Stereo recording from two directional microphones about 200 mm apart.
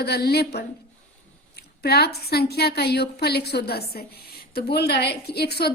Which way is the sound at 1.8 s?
55° left (ahead or behind).